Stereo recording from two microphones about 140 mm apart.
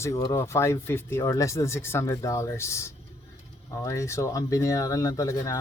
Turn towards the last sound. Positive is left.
turn(degrees=25)  # may be behind; listen again after turning